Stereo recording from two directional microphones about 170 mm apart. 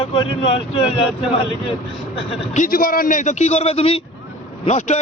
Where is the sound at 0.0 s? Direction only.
35° left (ahead or behind).